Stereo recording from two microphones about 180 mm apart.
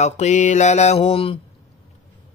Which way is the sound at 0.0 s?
40° left (ahead or behind).